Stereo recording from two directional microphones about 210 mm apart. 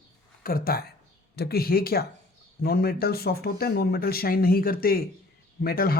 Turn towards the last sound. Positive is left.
turn(degrees=45)  # may be behind; listen again after turning